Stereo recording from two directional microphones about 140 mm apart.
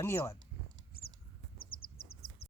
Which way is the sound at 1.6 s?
90° left.